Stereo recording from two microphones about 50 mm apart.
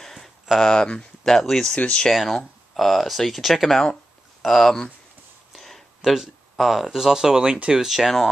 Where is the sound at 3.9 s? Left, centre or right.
Centre.